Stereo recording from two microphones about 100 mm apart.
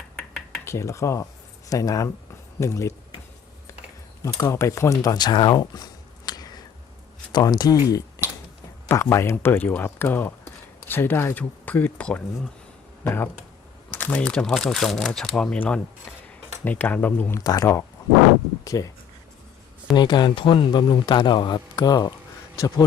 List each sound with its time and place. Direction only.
0.6 s speech: 30° left (ahead or behind)
4.2 s speech: 30° left (ahead or behind)
5.1 s a sound: 45° left (ahead or behind)
7.3 s speech: 40° left (ahead or behind); by 17.4 s 20° left (ahead or behind)
17.4 s speech: 40° left (ahead or behind)
20.0 s a man's voice: 50° left (ahead or behind)